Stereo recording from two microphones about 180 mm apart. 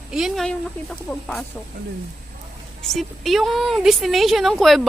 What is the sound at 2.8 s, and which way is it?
Speech, centre (ahead or behind).